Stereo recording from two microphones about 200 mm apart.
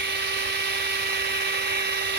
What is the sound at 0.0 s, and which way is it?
Dental drill, 60° right (ahead or behind).